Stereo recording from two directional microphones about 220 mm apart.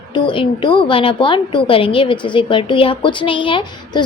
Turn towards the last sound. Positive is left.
turn(degrees=20)  # may be behind; listen again after turning